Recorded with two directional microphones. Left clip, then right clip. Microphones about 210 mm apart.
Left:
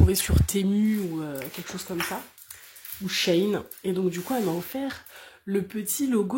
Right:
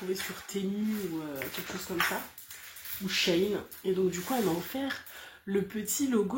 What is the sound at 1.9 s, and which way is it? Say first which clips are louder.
Speech: right 1 dB; 50° left (ahead or behind).